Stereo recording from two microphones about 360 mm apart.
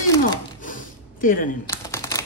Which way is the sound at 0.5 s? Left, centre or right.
Left.